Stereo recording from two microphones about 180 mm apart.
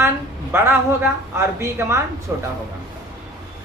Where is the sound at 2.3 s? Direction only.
10° right (ahead or behind).